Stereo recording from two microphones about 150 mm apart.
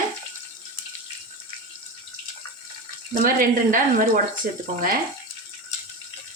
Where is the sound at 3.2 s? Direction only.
70° right (ahead or behind).